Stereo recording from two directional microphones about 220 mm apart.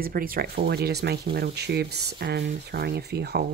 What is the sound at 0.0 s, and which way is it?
Speech, 40° right (ahead or behind).